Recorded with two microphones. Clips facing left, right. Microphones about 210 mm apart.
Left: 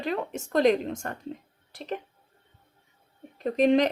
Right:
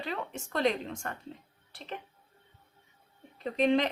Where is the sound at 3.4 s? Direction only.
40° left (ahead or behind).